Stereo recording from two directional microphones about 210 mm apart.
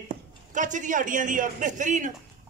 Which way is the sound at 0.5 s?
35° right (ahead or behind).